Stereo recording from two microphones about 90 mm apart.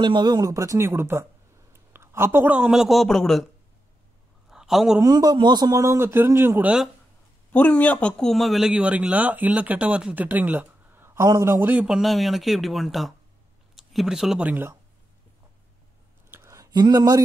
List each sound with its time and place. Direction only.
0.0 s a man's voice: 60° right (ahead or behind); by 1.2 s 30° right (ahead or behind)
1.7 s a sound: 25° right (ahead or behind)
2.7 s speech: 5° right (ahead or behind)
4.5 s a sound: 5° right (ahead or behind)
5.0 s a man's voice: 50° right (ahead or behind); by 6.6 s 30° right (ahead or behind)
6.6 s speech: 5° right (ahead or behind)
7.5 s a man's voice: 15° left (ahead or behind)
8.2 s speech: centre (ahead or behind); by 11.2 s 25° right (ahead or behind)
11.2 s a man's voice: 40° right (ahead or behind)
11.8 s speech: 5° right (ahead or behind)
16.3 s a sound: 30° right (ahead or behind)
16.7 s speech: 50° right (ahead or behind)